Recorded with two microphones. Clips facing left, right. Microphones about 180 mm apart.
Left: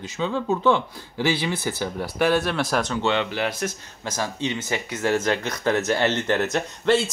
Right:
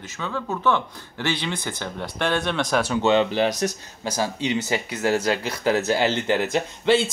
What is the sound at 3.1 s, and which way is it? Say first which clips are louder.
Speech: right 5 dB; 25° right (ahead or behind).